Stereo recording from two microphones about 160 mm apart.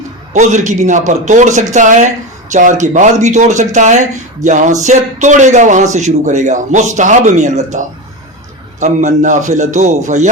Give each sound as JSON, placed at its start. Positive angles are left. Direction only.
{"t": 0.3, "sound": "a man's voice", "side_deg": -50}